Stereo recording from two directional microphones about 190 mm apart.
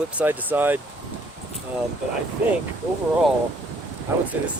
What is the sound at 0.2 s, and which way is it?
Speech, 10° right (ahead or behind).